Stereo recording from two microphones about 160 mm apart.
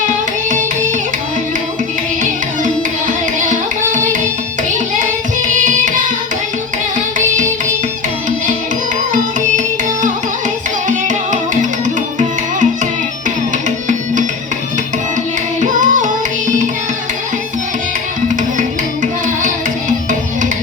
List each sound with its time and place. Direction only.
3.1 s music: 55° right (ahead or behind)
5.6 s carnatic music: 55° right (ahead or behind)
9.1 s music: 55° right (ahead or behind)
13.7 s music: 50° right (ahead or behind)
15.7 s music: 55° right (ahead or behind)